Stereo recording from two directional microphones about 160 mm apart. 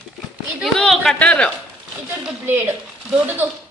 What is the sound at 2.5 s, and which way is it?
Speech, 15° right (ahead or behind).